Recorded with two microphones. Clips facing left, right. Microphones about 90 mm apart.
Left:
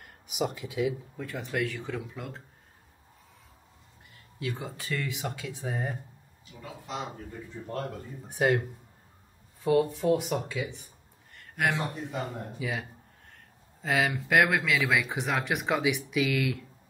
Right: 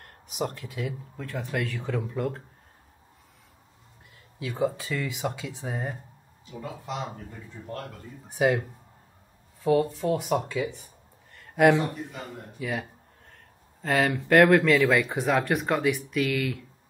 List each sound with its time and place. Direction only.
0.0 s speech: 5° left (ahead or behind)
4.1 s speech: centre (ahead or behind)
6.5 s speech: 40° right (ahead or behind)
8.3 s speech: centre (ahead or behind)
11.3 s a sound: centre (ahead or behind)
12.5 s speech: centre (ahead or behind)